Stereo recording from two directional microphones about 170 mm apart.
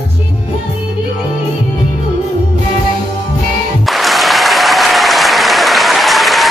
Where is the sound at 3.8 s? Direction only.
Centre (ahead or behind).